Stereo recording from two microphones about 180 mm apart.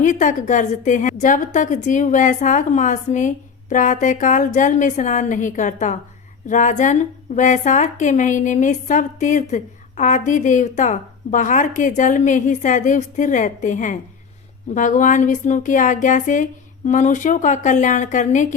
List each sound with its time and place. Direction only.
0.0 s a woman's voice: 45° left (ahead or behind)